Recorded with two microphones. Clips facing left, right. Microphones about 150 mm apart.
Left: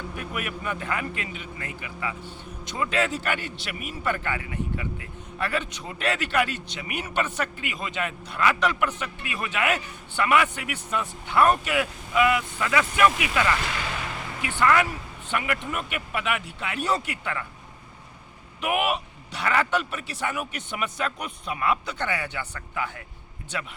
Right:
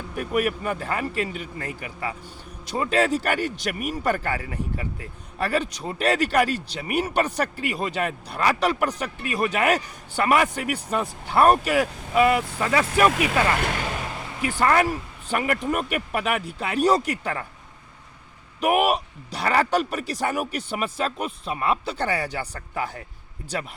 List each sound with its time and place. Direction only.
0.2 s speech: 40° right (ahead or behind)
13.6 s speech: 50° right (ahead or behind)
18.6 s speech: 40° right (ahead or behind)